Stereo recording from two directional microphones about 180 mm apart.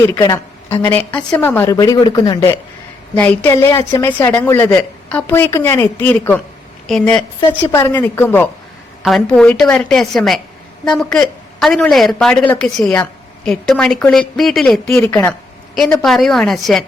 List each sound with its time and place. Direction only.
0.1 s a woman's voice: 15° left (ahead or behind)
3.2 s a woman's voice: 10° left (ahead or behind)
9.0 s a woman's voice: centre (ahead or behind)